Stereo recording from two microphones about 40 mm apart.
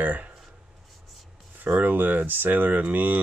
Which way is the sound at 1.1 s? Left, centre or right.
Centre.